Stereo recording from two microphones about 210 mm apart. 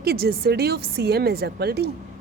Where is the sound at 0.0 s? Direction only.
50° right (ahead or behind).